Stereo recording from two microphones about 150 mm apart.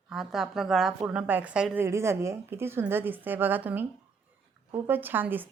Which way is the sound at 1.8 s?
20° right (ahead or behind).